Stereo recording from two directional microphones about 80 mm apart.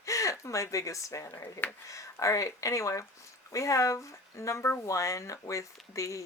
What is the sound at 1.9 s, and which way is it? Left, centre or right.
Speech, left.